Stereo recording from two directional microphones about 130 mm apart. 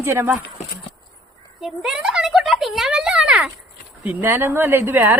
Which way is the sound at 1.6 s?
5° right (ahead or behind).